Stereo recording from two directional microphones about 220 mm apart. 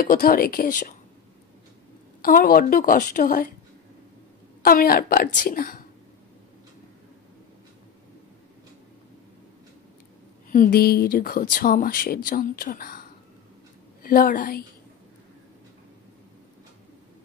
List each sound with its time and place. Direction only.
0.0 s speech: 40° left (ahead or behind)
2.2 s speech: 40° left (ahead or behind)
4.6 s speech: 40° left (ahead or behind)
10.5 s speech: 40° left (ahead or behind)
14.0 s speech: 40° left (ahead or behind)